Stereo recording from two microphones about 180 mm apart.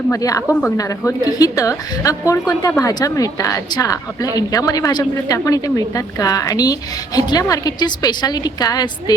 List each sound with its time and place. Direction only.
0.1 s speech: 20° left (ahead or behind)